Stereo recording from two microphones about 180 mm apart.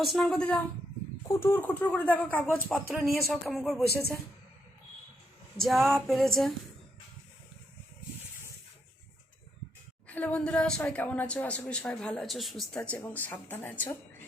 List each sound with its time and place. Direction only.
0.0 s speech: centre (ahead or behind)
1.3 s a woman's voice: 15° left (ahead or behind)
2.6 s speech: centre (ahead or behind)
5.5 s speech: centre (ahead or behind)
10.1 s a woman's voice: 5° left (ahead or behind)